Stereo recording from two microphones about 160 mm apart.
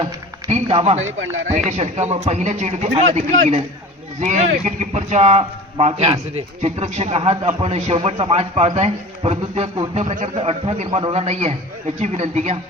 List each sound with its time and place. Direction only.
0.0 s speech: 40° right (ahead or behind)